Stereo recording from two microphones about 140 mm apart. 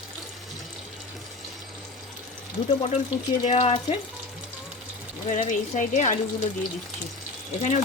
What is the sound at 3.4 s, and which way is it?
Speech, 50° left (ahead or behind).